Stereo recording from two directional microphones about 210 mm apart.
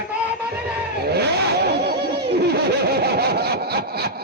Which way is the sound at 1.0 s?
50° right (ahead or behind).